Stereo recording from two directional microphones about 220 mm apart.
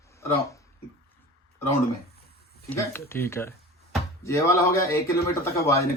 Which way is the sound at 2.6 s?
10° left (ahead or behind).